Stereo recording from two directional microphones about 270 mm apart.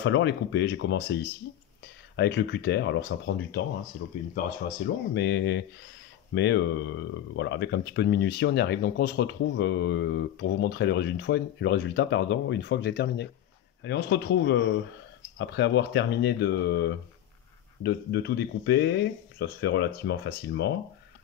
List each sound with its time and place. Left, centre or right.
0.0 s speech: left
4.6 s speech: left